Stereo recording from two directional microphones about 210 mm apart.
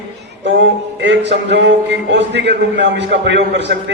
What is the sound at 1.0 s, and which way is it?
A man's voice, 55° right (ahead or behind).